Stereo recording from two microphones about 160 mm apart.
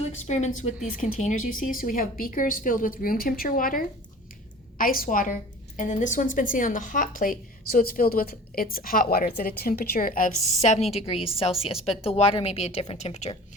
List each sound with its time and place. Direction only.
0.0 s a woman's voice: 45° left (ahead or behind)
10.6 s a woman's voice: 40° left (ahead or behind)